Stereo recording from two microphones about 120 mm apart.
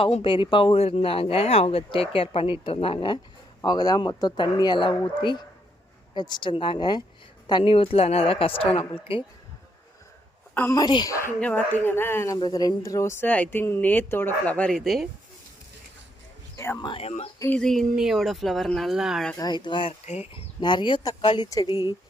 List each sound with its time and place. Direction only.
0.0 s speech: 50° left (ahead or behind)
3.6 s speech: 35° left (ahead or behind)
10.7 s speech: 35° left (ahead or behind)
11.3 s speech: 10° left (ahead or behind)
12.4 s speech: 35° left (ahead or behind); by 15.1 s centre (ahead or behind)
16.8 s speech: 45° left (ahead or behind)
17.6 s speech: 5° left (ahead or behind)
19.4 s speech: 40° left (ahead or behind)